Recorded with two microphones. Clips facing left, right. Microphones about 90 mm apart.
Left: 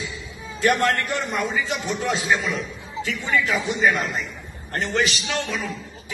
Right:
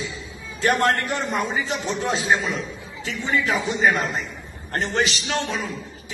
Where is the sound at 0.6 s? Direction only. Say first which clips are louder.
Even; 35° right (ahead or behind).